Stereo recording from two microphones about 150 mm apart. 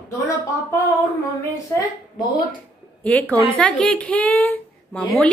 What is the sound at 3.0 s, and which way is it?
A woman's voice, 10° left (ahead or behind).